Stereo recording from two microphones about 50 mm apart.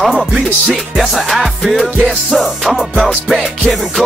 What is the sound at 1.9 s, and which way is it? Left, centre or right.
Music, centre.